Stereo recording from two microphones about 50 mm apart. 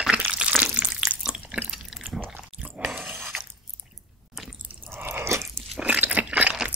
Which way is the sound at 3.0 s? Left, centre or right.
Right.